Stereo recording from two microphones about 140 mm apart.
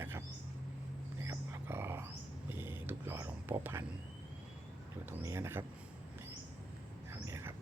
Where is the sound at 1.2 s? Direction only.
20° right (ahead or behind).